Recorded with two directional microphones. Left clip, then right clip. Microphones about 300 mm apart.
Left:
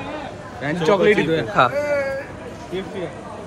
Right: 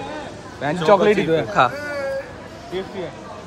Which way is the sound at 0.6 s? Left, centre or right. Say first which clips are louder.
Right 2 dB; right.